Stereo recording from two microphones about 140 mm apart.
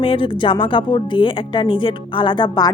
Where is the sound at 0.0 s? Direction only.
40° left (ahead or behind).